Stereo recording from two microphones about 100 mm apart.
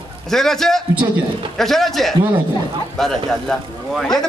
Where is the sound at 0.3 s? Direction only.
5° left (ahead or behind).